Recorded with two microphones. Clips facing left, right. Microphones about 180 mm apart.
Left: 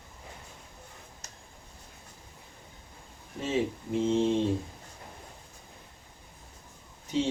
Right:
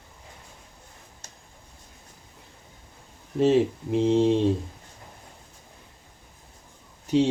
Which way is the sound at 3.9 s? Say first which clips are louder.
Right 5 dB; 70° right (ahead or behind).